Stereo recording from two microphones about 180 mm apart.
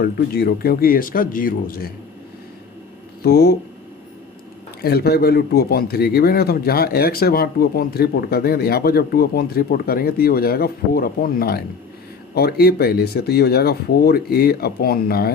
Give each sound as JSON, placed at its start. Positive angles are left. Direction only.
{"t": 0.0, "sound": "speech", "side_deg": 60}
{"t": 3.2, "sound": "a man's voice", "side_deg": 60}
{"t": 4.8, "sound": "a man's voice", "side_deg": 60}